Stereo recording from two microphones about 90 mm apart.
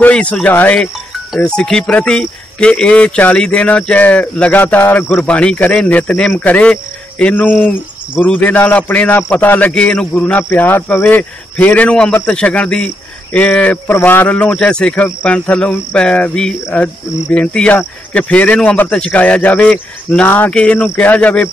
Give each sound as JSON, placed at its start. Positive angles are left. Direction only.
{"t": 0.0, "sound": "speech", "side_deg": 15}
{"t": 0.7, "sound": "speech", "side_deg": 0}
{"t": 1.4, "sound": "speech", "side_deg": 10}